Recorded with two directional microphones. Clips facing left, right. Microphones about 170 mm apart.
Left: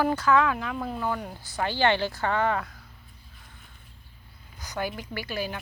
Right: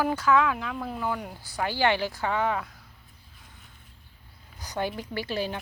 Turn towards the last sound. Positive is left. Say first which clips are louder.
# right 2 dB
turn(degrees=-30)  # may be behind; listen again after turning